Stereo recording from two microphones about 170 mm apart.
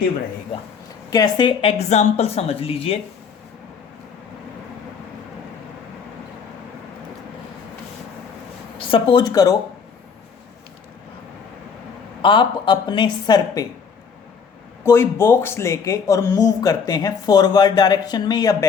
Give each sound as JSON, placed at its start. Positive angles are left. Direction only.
{"t": 1.1, "sound": "speech", "side_deg": 25}
{"t": 1.9, "sound": "speech", "side_deg": 40}
{"t": 8.8, "sound": "speech", "side_deg": 30}
{"t": 12.2, "sound": "speech", "side_deg": 30}
{"t": 14.8, "sound": "speech", "side_deg": 15}